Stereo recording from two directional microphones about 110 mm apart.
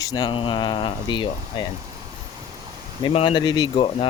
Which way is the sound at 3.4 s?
40° left (ahead or behind).